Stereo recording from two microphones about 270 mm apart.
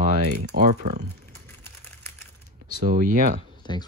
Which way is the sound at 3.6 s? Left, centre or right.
Centre.